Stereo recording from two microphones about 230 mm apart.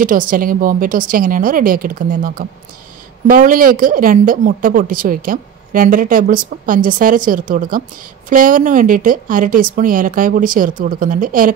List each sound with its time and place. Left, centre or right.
0.0 s a woman's voice: right